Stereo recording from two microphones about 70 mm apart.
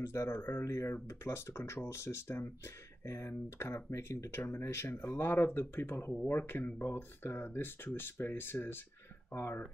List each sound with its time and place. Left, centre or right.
0.0 s speech: left